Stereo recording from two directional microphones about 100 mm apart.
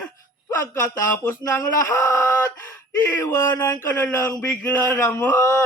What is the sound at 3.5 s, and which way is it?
Groan, 40° left (ahead or behind).